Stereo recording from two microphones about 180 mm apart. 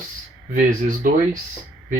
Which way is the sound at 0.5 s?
50° right (ahead or behind).